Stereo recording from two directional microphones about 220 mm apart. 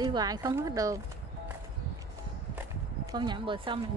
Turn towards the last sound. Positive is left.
turn(degrees=-20)  # may be behind; listen again after turning